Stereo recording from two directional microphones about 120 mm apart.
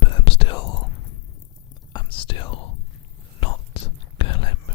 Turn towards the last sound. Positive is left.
turn(degrees=45)  # may be behind; listen again after turning